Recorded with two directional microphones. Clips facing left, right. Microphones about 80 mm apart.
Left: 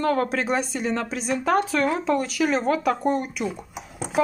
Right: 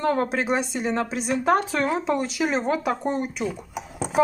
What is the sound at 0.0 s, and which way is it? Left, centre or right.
A woman's voice, right.